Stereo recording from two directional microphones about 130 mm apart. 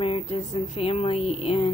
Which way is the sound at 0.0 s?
45° left (ahead or behind).